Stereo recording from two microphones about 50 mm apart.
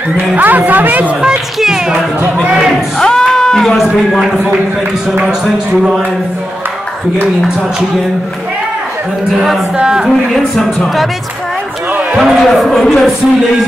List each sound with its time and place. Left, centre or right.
0.4 s a woman's voice: right
1.2 s speech: centre
3.0 s a sound: centre
3.7 s a man's voice: centre
9.8 s speech: centre
10.0 s a man's voice: centre
12.2 s a man's voice: centre